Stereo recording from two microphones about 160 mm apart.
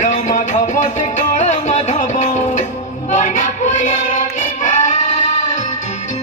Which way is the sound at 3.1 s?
50° left (ahead or behind).